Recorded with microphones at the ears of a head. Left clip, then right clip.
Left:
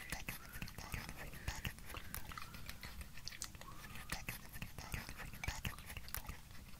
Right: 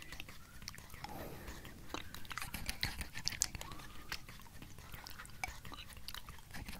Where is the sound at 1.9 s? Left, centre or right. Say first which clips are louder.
Right 5 dB; right.